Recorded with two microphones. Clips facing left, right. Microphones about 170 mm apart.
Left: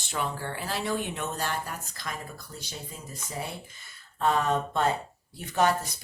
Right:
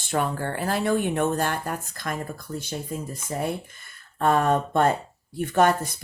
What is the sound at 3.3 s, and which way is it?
Speech, 55° right (ahead or behind).